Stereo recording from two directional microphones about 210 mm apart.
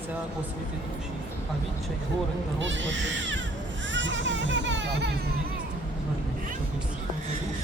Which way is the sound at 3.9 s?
60° right (ahead or behind).